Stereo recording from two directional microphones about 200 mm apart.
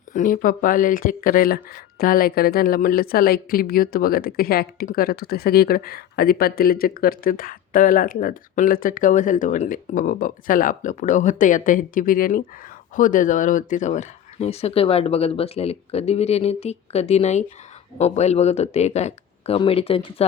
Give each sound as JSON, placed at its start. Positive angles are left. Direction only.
{"t": 0.1, "sound": "speech", "side_deg": 40}